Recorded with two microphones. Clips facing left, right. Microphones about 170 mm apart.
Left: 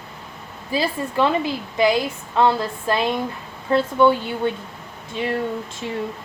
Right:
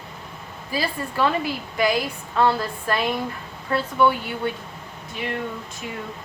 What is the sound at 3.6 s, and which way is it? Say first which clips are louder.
Speech: left 4 dB; 25° left (ahead or behind).